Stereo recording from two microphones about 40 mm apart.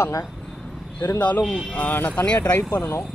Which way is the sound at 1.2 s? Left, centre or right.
Left.